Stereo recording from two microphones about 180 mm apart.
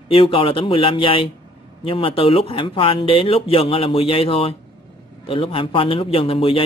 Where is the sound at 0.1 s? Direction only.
30° left (ahead or behind).